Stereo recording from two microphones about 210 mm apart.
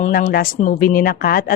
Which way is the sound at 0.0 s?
40° left (ahead or behind).